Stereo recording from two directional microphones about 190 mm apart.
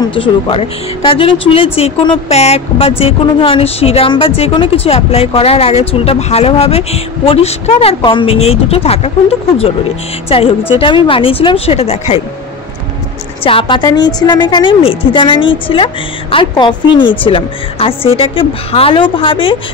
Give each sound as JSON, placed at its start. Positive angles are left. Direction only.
{"t": 0.1, "sound": "a woman's voice", "side_deg": 30}
{"t": 10.8, "sound": "a woman's voice", "side_deg": 30}
{"t": 13.4, "sound": "a woman's voice", "side_deg": 30}